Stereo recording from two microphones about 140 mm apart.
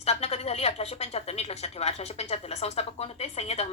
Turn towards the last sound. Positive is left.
turn(degrees=50)  # may be behind; listen again after turning